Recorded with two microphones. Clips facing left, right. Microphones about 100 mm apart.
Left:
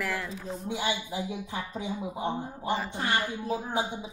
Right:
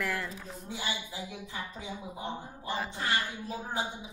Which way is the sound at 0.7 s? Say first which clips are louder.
Left 6 dB; 60° left (ahead or behind).